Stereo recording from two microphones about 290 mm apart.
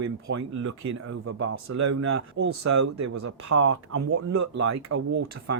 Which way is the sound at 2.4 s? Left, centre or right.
Right.